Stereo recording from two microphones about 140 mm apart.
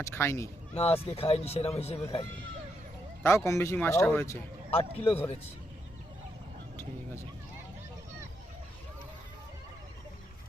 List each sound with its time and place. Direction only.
0.0 s speech: 15° left (ahead or behind)
0.7 s speech: 45° left (ahead or behind)
3.2 s speech: 20° left (ahead or behind)
4.7 s speech: 45° left (ahead or behind)